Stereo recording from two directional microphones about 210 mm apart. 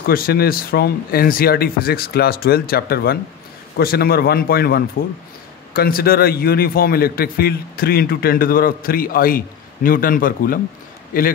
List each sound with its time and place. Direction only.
0.0 s a man's voice: 45° left (ahead or behind)